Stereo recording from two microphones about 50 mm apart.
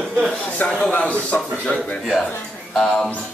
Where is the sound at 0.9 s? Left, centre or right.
Left.